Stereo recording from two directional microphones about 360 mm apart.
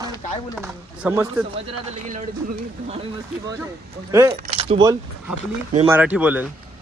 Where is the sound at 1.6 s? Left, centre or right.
Centre.